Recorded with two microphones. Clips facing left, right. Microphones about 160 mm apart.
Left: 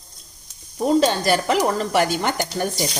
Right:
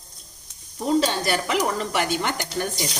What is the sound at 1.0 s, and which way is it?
A woman's voice, 40° left (ahead or behind).